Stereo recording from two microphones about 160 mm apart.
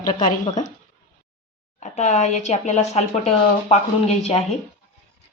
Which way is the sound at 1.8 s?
45° left (ahead or behind).